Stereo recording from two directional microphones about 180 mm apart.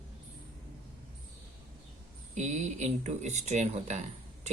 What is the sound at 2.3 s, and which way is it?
A woman's voice, 40° right (ahead or behind).